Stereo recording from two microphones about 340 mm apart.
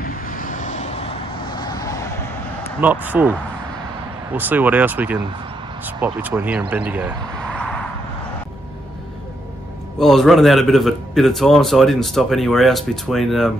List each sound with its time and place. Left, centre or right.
0.0 s vehicle: left; by 2.3 s centre
2.8 s a man's voice: centre
6.9 s a sound: centre
9.9 s a man's voice: centre